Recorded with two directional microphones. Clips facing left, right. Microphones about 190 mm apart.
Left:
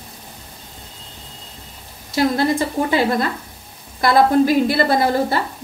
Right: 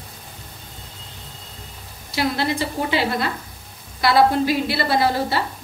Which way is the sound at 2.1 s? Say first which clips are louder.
Left 5 dB; 45° left (ahead or behind).